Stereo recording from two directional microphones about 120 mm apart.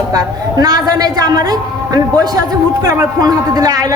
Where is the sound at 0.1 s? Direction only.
30° right (ahead or behind).